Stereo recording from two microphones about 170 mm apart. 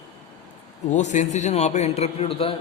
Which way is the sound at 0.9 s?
45° left (ahead or behind).